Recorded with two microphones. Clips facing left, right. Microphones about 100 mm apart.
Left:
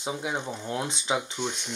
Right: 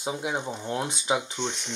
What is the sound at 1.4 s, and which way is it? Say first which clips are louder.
Speech: even; 5° left (ahead or behind).